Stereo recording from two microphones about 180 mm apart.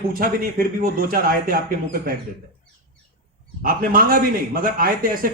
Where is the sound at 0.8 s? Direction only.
55° right (ahead or behind).